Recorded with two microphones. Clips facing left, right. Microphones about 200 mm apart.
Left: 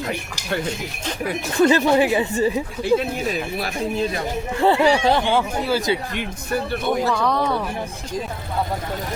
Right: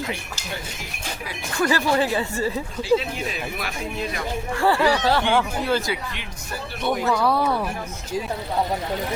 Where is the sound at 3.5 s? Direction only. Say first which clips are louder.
Left 6 dB; 30° left (ahead or behind).